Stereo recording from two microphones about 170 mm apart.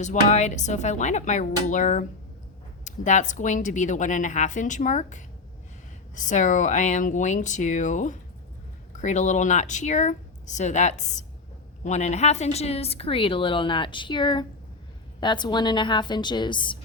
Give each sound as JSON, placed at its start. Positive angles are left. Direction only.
{"t": 0.0, "sound": "a woman's voice", "side_deg": 45}